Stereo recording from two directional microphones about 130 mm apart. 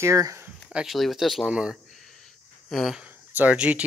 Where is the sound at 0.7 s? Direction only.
Centre (ahead or behind).